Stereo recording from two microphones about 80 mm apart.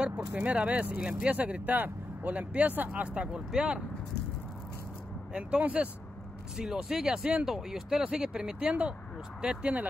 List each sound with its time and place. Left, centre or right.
0.0 s speech: centre
5.3 s speech: centre